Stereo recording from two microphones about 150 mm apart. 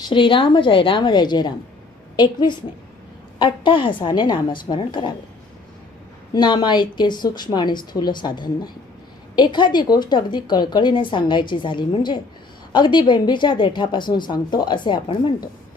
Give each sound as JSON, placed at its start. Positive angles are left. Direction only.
{"t": 0.1, "sound": "speech", "side_deg": 35}
{"t": 6.3, "sound": "a woman's voice", "side_deg": 30}